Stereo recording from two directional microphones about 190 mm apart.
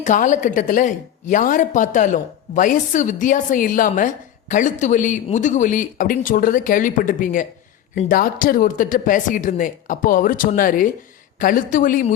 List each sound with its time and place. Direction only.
0.0 s a woman's voice: 40° left (ahead or behind)